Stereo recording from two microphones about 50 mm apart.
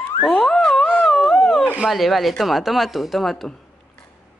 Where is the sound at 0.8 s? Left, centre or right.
Left.